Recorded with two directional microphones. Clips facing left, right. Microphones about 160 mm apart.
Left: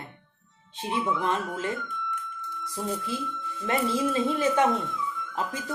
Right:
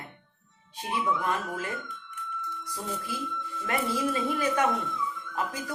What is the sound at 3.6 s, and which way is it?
A woman's voice, 25° left (ahead or behind).